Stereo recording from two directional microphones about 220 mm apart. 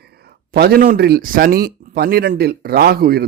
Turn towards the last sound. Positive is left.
turn(degrees=-45)  # may be behind; listen again after turning